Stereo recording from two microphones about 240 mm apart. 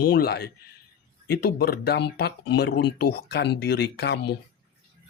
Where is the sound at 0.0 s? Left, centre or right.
Left.